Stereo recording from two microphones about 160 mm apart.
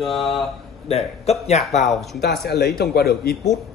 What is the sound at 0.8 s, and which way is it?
Speech, 40° left (ahead or behind).